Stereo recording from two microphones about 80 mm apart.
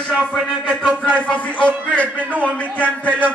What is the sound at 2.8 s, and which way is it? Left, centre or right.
Speech, centre.